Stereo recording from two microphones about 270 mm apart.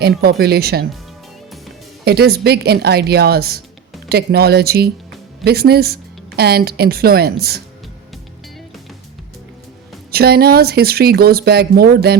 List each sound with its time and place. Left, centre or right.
0.0 s speech: right
2.0 s speech: right
10.1 s speech: right